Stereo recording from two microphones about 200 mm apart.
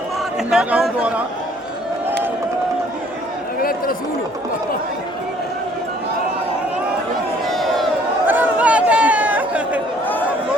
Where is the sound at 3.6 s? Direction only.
45° left (ahead or behind).